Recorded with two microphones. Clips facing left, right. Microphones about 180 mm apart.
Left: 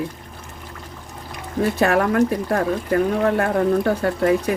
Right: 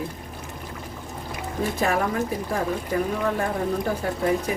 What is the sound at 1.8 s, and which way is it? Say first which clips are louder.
Speech: left 7 dB; 70° left (ahead or behind).